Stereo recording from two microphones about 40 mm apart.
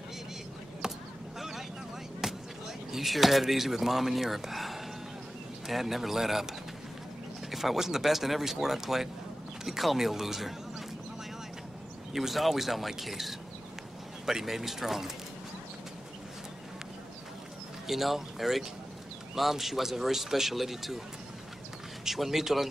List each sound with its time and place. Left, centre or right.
0.8 s honk: centre
2.2 s speech: centre
7.5 s speech: centre
12.1 s speech: centre
17.8 s speech: centre
22.0 s speech: centre